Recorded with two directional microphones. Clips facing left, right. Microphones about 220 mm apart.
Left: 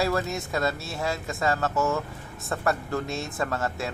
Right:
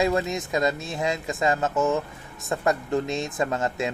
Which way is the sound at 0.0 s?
15° right (ahead or behind).